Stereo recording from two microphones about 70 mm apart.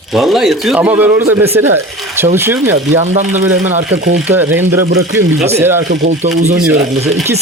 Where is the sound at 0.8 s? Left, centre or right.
Centre.